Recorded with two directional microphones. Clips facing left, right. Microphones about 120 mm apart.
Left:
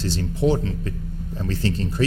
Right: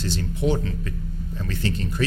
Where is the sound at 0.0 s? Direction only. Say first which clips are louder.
Left 3 dB; 35° left (ahead or behind).